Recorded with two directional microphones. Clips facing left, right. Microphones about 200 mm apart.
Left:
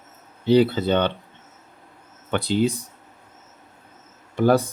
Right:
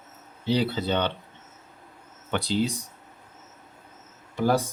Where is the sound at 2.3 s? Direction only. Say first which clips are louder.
Left 5 dB; 55° left (ahead or behind).